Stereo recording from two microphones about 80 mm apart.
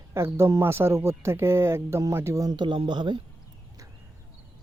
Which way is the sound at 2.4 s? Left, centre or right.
Right.